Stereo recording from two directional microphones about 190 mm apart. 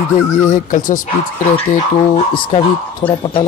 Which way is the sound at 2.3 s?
25° left (ahead or behind).